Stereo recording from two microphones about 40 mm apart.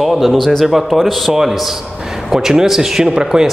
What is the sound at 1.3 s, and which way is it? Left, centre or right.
Speech, centre.